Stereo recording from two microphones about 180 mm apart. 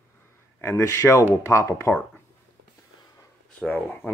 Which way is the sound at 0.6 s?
15° left (ahead or behind).